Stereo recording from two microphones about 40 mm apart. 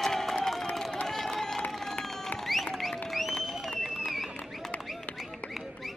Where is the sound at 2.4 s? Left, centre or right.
Centre.